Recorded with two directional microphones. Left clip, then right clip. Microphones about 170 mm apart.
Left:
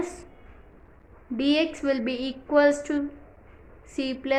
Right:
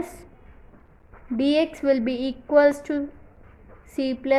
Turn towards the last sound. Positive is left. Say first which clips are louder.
# right 4 dB
turn(degrees=-25)  # may be behind; listen again after turning